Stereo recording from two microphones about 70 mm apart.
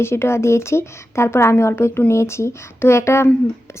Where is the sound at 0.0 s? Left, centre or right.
Left.